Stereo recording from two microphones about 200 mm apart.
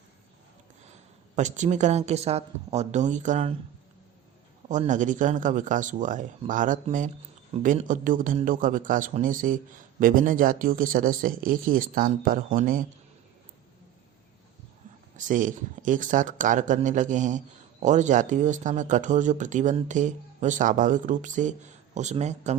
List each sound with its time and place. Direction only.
1.4 s speech: 35° right (ahead or behind)
4.7 s speech: 40° right (ahead or behind)
15.1 s speech: 40° right (ahead or behind)